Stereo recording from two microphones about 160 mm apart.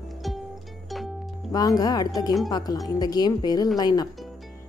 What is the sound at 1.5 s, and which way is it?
A woman's voice, 25° left (ahead or behind).